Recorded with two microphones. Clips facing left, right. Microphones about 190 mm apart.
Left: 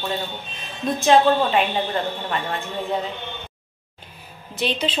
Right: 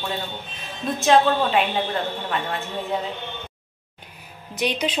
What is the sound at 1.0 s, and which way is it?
Speech, centre (ahead or behind).